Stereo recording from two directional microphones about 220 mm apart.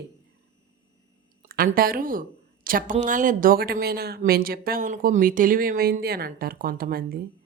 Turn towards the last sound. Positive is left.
turn(degrees=-40)  # may be behind; listen again after turning